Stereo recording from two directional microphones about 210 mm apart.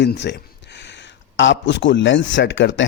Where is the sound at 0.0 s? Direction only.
55° left (ahead or behind).